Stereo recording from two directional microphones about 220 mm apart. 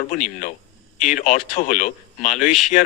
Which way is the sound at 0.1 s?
35° left (ahead or behind).